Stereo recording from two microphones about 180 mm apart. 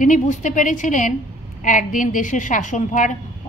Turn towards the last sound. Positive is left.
turn(degrees=45)  # may be behind; listen again after turning